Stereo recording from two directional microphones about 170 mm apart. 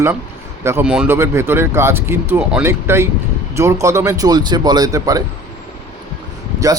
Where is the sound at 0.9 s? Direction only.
5° right (ahead or behind).